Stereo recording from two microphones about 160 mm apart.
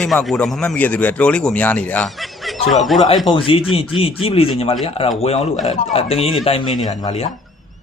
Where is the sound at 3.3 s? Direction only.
35° left (ahead or behind).